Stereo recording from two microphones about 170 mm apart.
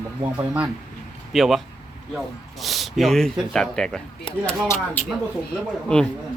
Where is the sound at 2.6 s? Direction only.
Centre (ahead or behind).